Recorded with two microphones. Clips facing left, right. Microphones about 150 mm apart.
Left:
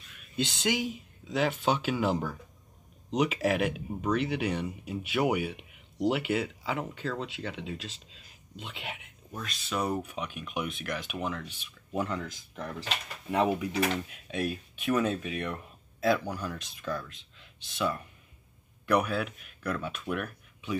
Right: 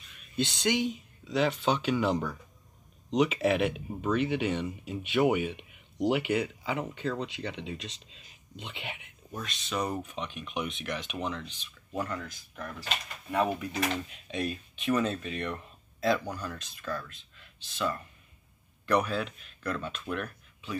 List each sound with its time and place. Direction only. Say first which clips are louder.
0.1 s speech: right 1 dB; centre (ahead or behind); by 12.2 s 20° left (ahead or behind)
13.3 s speech: left 2 dB; 15° left (ahead or behind)